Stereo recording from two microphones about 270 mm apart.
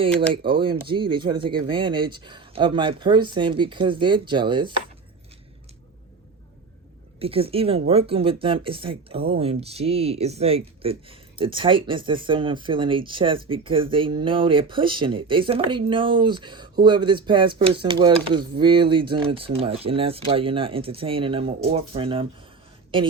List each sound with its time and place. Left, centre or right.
0.0 s speech: centre
7.2 s speech: right